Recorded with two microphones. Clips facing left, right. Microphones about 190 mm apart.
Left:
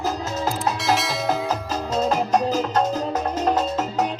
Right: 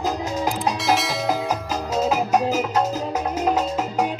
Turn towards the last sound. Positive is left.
turn(degrees=-10)  # may be behind; listen again after turning